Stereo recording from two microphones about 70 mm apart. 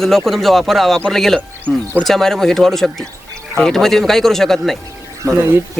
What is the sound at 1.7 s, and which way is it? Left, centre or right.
Speech, centre.